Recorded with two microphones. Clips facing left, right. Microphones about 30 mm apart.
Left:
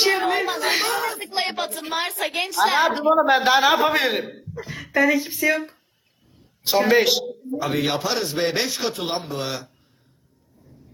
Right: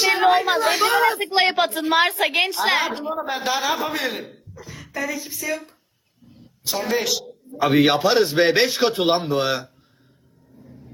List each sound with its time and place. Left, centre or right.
0.1 s a sound: centre
0.9 s a man's voice: right
2.8 s a man's voice: left
7.6 s a man's voice: right
10.6 s vehicle: right